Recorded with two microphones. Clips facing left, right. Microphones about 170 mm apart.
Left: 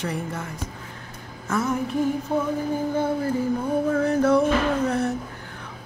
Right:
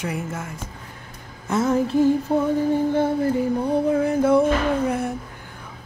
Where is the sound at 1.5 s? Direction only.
25° right (ahead or behind).